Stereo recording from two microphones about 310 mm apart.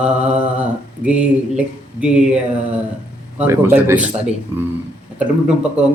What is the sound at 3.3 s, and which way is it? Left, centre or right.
Speech, centre.